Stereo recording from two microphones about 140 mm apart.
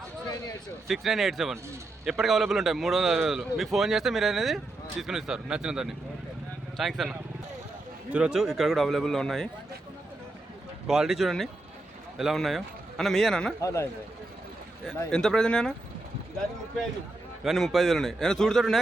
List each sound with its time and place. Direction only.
0.9 s a man's voice: centre (ahead or behind)
10.8 s a man's voice: 5° right (ahead or behind)
13.6 s a man's voice: 20° left (ahead or behind)
15.1 s a man's voice: 5° left (ahead or behind)
17.4 s a man's voice: centre (ahead or behind)